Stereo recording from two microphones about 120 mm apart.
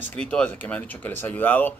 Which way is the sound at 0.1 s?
10° left (ahead or behind).